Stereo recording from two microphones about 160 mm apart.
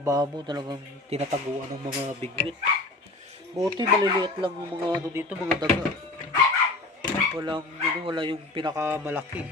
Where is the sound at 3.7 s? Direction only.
25° right (ahead or behind).